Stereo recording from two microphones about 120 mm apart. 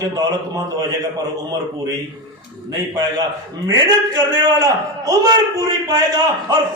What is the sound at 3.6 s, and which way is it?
A man's voice, 35° right (ahead or behind).